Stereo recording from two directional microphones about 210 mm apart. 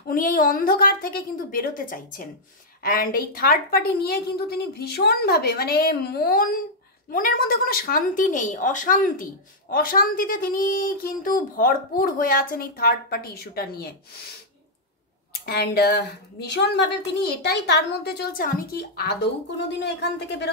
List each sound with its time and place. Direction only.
0.1 s a woman's voice: 40° left (ahead or behind)
15.4 s speech: 50° left (ahead or behind)